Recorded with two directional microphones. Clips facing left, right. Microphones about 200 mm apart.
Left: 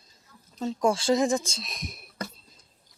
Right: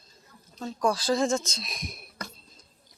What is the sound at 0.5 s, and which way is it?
Speech, 25° left (ahead or behind).